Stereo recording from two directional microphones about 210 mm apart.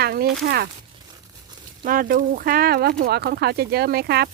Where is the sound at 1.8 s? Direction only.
40° right (ahead or behind).